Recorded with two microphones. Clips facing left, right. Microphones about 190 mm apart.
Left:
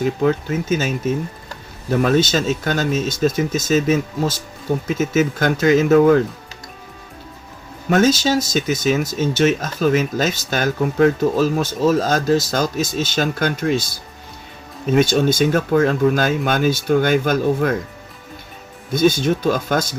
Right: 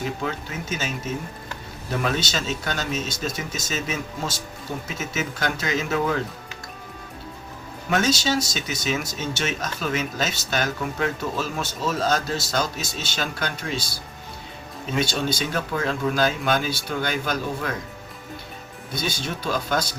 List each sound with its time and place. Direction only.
0.0 s speech: 45° left (ahead or behind)
7.9 s speech: 40° left (ahead or behind)
14.9 s speech: 50° left (ahead or behind)
18.9 s speech: 45° left (ahead or behind)